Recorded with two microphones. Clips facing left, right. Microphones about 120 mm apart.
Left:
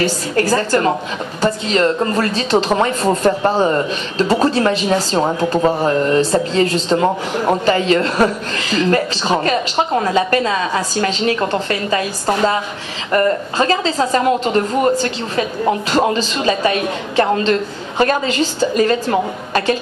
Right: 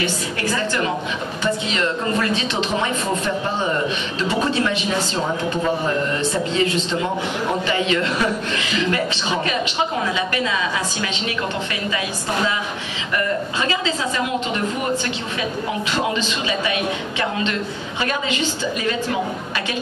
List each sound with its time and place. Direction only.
0.0 s a woman's voice: 40° left (ahead or behind)
13.1 s a woman's voice: 45° left (ahead or behind)